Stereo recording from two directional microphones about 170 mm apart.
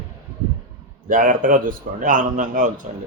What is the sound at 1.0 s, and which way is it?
Speech, 50° right (ahead or behind).